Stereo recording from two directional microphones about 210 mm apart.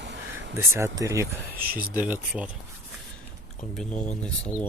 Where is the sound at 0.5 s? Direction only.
15° right (ahead or behind).